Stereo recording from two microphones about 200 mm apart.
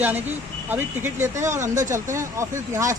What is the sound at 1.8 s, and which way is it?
Speech, 15° right (ahead or behind).